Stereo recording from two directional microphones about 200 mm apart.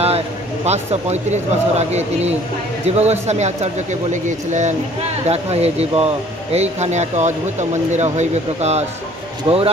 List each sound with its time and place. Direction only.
0.7 s speech: 35° right (ahead or behind)